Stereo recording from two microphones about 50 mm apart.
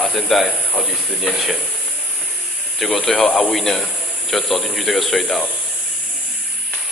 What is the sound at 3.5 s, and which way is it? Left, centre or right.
A man's voice, centre.